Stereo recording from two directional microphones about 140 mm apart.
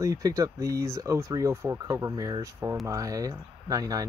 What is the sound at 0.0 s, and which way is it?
Speech, 25° right (ahead or behind).